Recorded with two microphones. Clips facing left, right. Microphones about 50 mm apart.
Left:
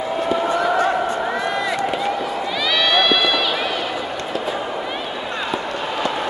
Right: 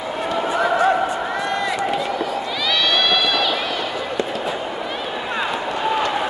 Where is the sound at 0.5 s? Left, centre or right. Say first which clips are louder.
Right 4 dB; centre.